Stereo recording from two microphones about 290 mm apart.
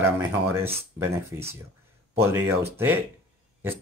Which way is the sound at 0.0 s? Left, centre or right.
Centre.